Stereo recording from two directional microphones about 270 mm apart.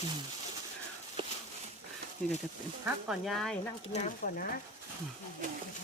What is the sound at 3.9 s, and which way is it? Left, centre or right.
Speech, left.